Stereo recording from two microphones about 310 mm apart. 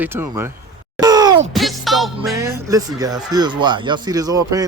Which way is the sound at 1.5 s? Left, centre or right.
Centre.